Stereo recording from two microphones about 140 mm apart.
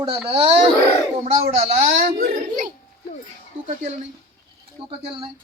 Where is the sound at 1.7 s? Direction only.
90° right.